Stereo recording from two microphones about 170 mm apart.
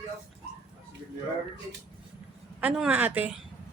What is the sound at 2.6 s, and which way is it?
Speech, 5° right (ahead or behind).